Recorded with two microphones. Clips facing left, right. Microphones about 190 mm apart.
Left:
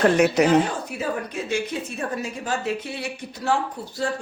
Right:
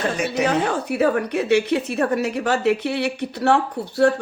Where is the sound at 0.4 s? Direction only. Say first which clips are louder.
Left 1 dB; 65° right (ahead or behind).